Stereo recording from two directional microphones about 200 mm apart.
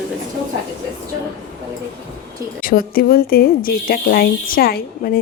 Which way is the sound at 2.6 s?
45° left (ahead or behind).